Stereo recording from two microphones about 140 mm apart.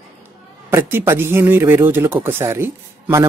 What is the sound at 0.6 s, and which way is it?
Speech, 15° right (ahead or behind).